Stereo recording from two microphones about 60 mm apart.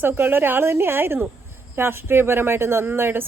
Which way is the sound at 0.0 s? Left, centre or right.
Right.